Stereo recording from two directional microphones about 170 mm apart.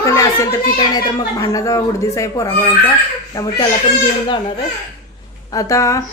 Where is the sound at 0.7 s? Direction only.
25° left (ahead or behind).